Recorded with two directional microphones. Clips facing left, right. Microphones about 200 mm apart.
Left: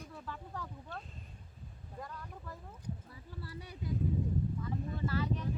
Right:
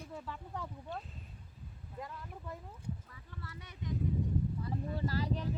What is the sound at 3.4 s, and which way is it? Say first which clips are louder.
Speech: left 2 dB; 35° left (ahead or behind).